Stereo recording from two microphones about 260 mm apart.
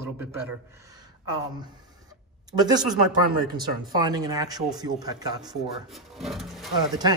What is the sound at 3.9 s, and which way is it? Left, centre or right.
A man's voice, centre.